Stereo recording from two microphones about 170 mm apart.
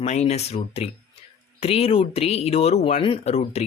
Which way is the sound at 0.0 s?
40° left (ahead or behind).